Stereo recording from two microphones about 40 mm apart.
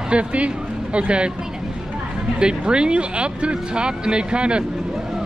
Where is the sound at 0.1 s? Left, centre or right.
Right.